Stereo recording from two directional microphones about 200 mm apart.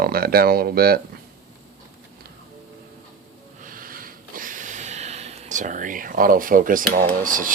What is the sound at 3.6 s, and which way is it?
Snort, 45° right (ahead or behind).